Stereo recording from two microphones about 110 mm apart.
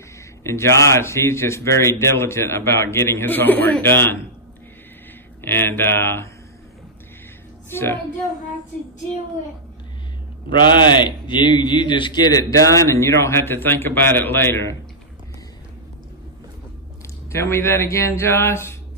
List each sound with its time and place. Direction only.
0.4 s a man's voice: 25° left (ahead or behind)
5.4 s a man's voice: 20° left (ahead or behind)
7.7 s a man's voice: 20° left (ahead or behind)
10.5 s a man's voice: 45° left (ahead or behind); by 14.8 s 25° left (ahead or behind)
17.3 s a man's voice: 25° left (ahead or behind)